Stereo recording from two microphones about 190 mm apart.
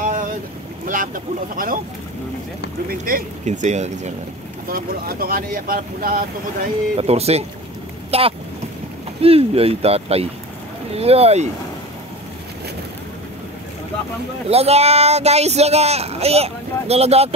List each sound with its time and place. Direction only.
0.8 s speech: 45° right (ahead or behind)
2.9 s speech: 50° right (ahead or behind)
4.6 s speech: 50° right (ahead or behind)
7.0 s speech: 35° right (ahead or behind)
14.5 s speech: 35° right (ahead or behind)